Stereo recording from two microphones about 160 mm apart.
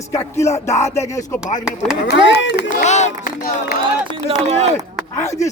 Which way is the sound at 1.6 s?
5° right (ahead or behind).